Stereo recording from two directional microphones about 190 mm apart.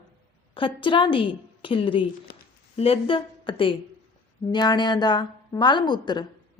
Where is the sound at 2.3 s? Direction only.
50° left (ahead or behind).